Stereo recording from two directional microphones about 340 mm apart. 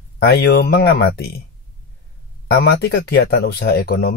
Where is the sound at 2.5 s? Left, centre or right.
Left.